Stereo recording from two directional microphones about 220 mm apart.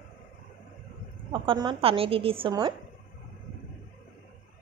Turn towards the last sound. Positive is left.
turn(degrees=-20)  # may be behind; listen again after turning